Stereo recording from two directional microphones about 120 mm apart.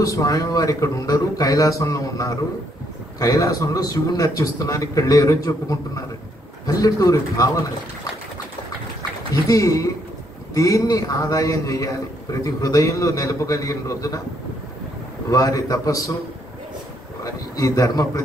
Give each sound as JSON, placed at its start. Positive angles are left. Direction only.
{"t": 0.0, "sound": "a man's voice", "side_deg": 30}
{"t": 9.3, "sound": "a man's voice", "side_deg": 30}
{"t": 15.2, "sound": "a man's voice", "side_deg": 30}
{"t": 17.2, "sound": "a man's voice", "side_deg": 30}